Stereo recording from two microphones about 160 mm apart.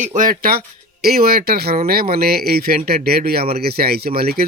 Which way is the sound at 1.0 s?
75° right (ahead or behind).